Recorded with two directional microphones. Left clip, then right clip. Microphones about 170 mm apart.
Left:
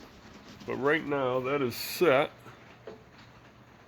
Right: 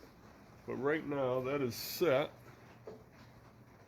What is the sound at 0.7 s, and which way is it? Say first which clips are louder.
Speech: left 8 dB; 40° left (ahead or behind).